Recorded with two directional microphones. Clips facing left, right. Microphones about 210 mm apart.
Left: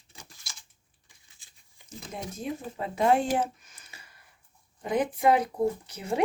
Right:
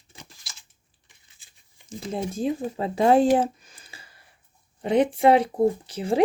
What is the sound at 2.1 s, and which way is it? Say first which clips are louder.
Speech: right 8 dB; 30° right (ahead or behind).